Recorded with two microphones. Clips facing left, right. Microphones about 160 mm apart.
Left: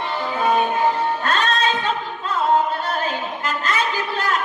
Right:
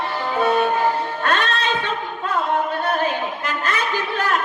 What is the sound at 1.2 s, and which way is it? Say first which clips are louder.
Music: right 1 dB; 60° right (ahead or behind).